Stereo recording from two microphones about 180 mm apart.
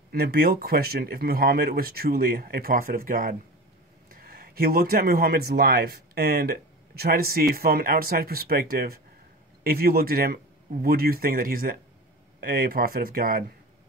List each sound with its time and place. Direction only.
0.1 s speech: 55° right (ahead or behind)